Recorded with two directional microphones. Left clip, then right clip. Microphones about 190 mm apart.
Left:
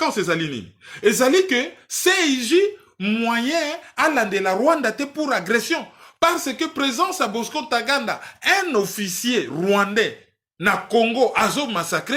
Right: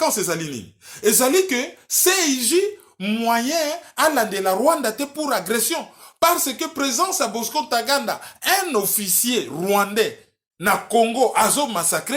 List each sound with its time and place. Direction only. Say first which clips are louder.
0.0 s speech: left 1 dB; 25° left (ahead or behind)